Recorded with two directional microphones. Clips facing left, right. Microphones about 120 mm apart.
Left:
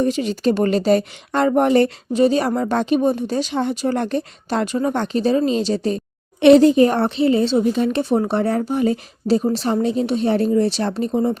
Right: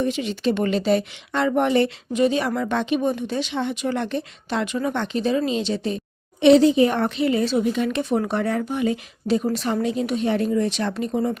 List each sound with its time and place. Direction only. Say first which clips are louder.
0.0 s a woman's voice: left 4 dB; 40° left (ahead or behind)